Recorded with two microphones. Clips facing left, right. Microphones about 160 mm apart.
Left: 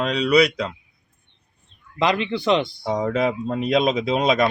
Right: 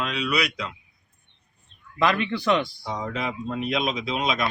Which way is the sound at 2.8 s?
65° left (ahead or behind).